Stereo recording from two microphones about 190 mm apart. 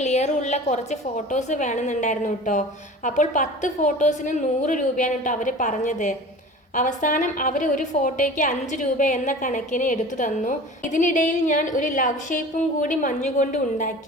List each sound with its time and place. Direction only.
0.0 s a woman's voice: 35° left (ahead or behind)